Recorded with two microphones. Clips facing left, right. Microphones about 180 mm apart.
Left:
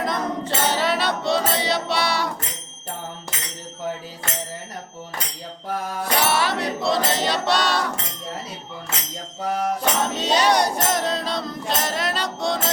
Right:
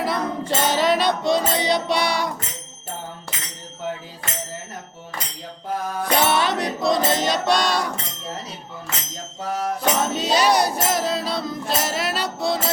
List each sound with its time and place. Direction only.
0.0 s music: 5° right (ahead or behind)
6.1 s music: 20° right (ahead or behind)
9.8 s music: 10° right (ahead or behind)